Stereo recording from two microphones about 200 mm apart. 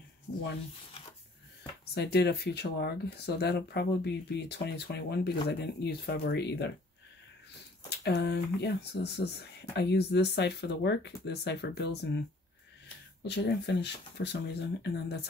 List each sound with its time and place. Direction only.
2.0 s speech: 55° left (ahead or behind)
8.0 s speech: 55° left (ahead or behind)
13.2 s speech: 55° left (ahead or behind)